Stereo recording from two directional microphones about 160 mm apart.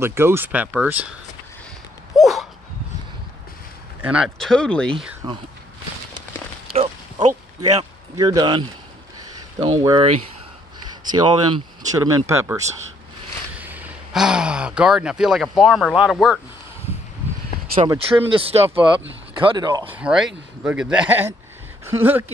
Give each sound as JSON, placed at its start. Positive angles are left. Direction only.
{"t": 0.0, "sound": "speech", "side_deg": -15}
{"t": 2.1, "sound": "dog", "side_deg": 0}
{"t": 4.0, "sound": "speech", "side_deg": -5}
{"t": 6.7, "sound": "a sound", "side_deg": -40}
{"t": 8.2, "sound": "speech", "side_deg": -25}
{"t": 11.1, "sound": "speech", "side_deg": -30}
{"t": 13.6, "sound": "speech", "side_deg": -10}
{"t": 17.9, "sound": "speech", "side_deg": -35}
{"t": 19.9, "sound": "speech", "side_deg": -5}